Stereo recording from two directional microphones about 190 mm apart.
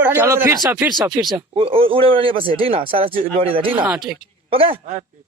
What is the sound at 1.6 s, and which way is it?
A man's voice, 30° right (ahead or behind).